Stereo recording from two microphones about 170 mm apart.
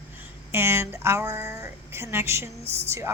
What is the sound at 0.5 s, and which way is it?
Speech, 15° right (ahead or behind).